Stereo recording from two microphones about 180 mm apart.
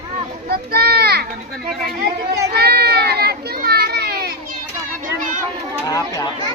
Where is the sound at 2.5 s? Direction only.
60° right (ahead or behind).